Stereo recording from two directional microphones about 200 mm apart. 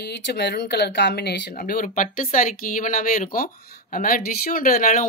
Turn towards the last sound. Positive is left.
turn(degrees=45)  # may be behind; listen again after turning